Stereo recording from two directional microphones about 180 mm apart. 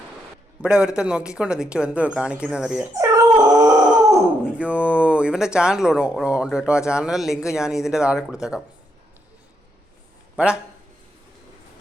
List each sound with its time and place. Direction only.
0.6 s speech: 5° right (ahead or behind)
2.9 s dog: 20° right (ahead or behind)
4.5 s speech: 5° right (ahead or behind)
10.3 s a man's voice: 5° right (ahead or behind)